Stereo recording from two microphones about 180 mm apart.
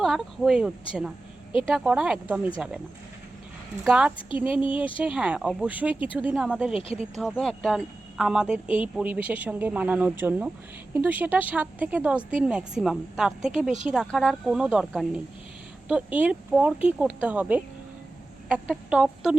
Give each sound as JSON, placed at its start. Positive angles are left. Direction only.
{"t": 0.0, "sound": "a woman's voice", "side_deg": 0}
{"t": 1.7, "sound": "a woman's voice", "side_deg": -5}
{"t": 3.8, "sound": "a woman's voice", "side_deg": -5}
{"t": 6.7, "sound": "speech", "side_deg": 30}
{"t": 7.2, "sound": "a woman's voice", "side_deg": 5}